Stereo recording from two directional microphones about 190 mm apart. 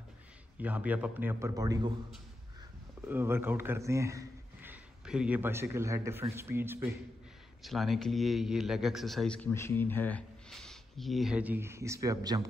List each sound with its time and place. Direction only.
0.6 s a man's voice: 10° right (ahead or behind)
3.1 s a man's voice: 10° right (ahead or behind)
7.6 s a man's voice: centre (ahead or behind); by 12.4 s 20° right (ahead or behind)